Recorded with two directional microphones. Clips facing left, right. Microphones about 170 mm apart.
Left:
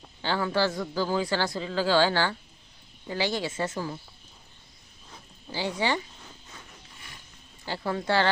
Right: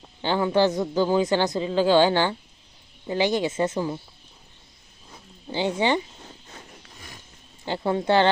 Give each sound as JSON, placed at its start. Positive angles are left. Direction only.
{"t": 0.2, "sound": "speech", "side_deg": -20}
{"t": 5.5, "sound": "speech", "side_deg": -20}
{"t": 6.2, "sound": "a sound", "side_deg": -35}
{"t": 7.6, "sound": "speech", "side_deg": -20}